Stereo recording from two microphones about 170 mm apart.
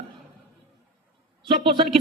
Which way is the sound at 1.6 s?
30° right (ahead or behind).